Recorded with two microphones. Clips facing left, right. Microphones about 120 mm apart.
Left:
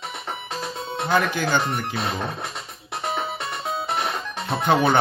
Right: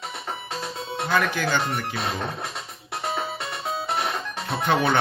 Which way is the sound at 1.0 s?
20° left (ahead or behind).